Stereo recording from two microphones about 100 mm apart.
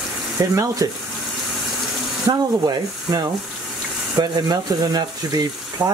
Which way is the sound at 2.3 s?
45° right (ahead or behind).